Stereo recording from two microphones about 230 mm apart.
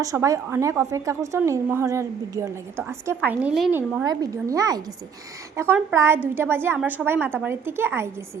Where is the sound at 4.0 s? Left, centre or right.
Centre.